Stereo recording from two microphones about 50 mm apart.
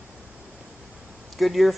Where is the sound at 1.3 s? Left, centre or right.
Centre.